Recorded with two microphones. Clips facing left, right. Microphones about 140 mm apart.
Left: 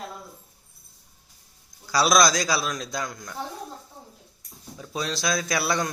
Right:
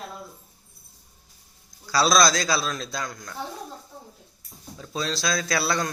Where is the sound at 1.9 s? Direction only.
15° left (ahead or behind).